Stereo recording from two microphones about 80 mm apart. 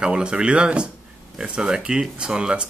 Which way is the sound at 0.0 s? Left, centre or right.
Centre.